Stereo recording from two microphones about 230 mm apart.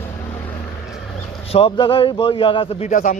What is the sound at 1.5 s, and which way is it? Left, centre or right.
A man's voice, left.